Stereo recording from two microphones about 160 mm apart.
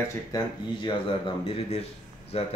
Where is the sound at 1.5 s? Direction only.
40° left (ahead or behind).